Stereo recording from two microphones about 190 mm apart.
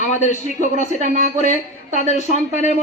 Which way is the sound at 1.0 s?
45° right (ahead or behind).